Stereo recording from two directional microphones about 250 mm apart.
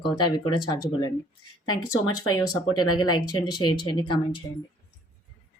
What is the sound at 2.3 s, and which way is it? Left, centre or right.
A woman's voice, centre.